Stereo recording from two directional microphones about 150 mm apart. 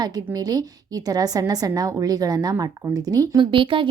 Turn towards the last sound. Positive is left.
turn(degrees=-35)  # may be behind; listen again after turning